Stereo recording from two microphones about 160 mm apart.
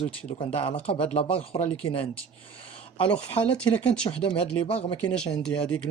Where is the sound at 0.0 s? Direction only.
45° left (ahead or behind).